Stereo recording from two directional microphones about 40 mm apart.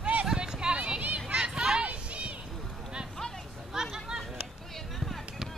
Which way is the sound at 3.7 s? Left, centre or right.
Centre.